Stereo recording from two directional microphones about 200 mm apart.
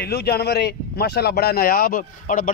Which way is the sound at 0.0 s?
50° left (ahead or behind).